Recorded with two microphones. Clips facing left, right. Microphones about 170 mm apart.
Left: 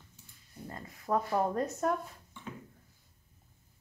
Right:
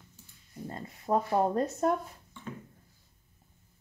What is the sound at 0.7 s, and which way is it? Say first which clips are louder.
Speech: right 3 dB; 25° right (ahead or behind).